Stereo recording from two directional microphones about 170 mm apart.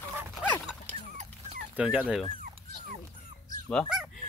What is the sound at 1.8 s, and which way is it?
Speech, 5° right (ahead or behind).